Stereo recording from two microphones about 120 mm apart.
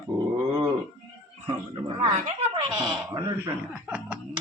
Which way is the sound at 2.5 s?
40° right (ahead or behind).